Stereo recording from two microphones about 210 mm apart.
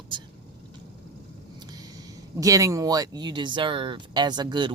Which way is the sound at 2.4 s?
15° right (ahead or behind).